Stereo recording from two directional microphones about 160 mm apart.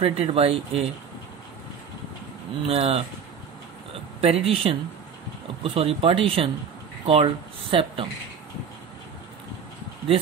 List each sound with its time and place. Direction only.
0.0 s speech: 35° right (ahead or behind)
2.7 s speech: 35° right (ahead or behind)
4.2 s speech: 40° right (ahead or behind)